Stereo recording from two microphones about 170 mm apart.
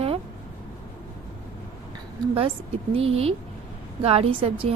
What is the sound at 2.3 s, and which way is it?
A woman's voice, 35° right (ahead or behind).